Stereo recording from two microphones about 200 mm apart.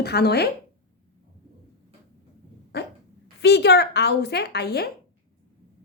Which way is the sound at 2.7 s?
55° left (ahead or behind).